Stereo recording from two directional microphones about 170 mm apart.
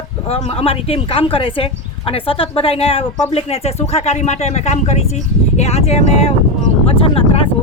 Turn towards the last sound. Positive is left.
turn(degrees=35)  # may be behind; listen again after turning